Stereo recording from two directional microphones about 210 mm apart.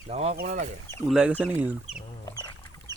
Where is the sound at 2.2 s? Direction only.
20° left (ahead or behind).